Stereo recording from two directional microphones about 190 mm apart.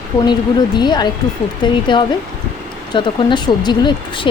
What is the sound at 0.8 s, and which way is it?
Speech, 20° left (ahead or behind).